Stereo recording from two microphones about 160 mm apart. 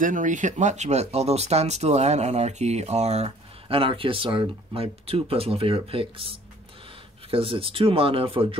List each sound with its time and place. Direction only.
0.0 s speech: 55° right (ahead or behind); by 8.5 s 35° right (ahead or behind)